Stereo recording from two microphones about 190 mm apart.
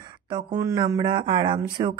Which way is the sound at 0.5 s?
20° right (ahead or behind).